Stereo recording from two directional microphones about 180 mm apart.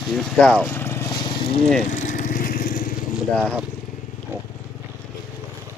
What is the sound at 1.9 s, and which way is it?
Vehicle, 45° left (ahead or behind).